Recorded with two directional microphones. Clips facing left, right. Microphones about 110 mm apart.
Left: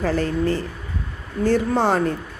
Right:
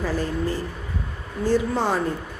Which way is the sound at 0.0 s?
65° left (ahead or behind).